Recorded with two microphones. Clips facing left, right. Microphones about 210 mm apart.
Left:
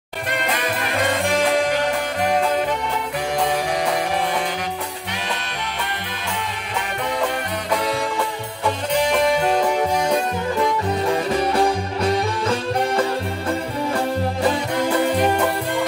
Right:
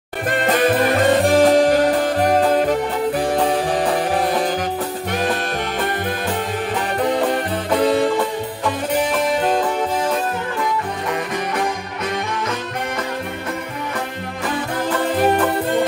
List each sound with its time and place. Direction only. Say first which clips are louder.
0.5 s music: right 12 dB; 35° right (ahead or behind)
7.0 s music: right 5 dB; 35° right (ahead or behind)
8.9 s music: left 2 dB; 5° right (ahead or behind)
11.3 s music: left 4 dB; 30° left (ahead or behind)